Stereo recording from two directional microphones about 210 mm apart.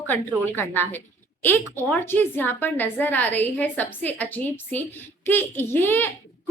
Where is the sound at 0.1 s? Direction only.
10° left (ahead or behind).